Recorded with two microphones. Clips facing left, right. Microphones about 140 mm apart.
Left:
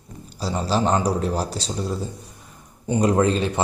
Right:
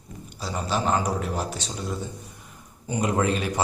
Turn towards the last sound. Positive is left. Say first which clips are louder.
# left 5 dB
turn(degrees=30)  # may be behind; listen again after turning